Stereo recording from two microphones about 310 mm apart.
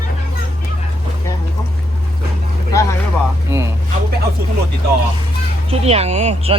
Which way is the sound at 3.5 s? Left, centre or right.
Centre.